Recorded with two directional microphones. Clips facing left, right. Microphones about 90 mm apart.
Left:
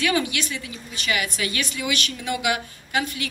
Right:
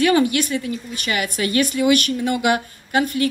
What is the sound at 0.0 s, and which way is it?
A woman's voice, 45° right (ahead or behind).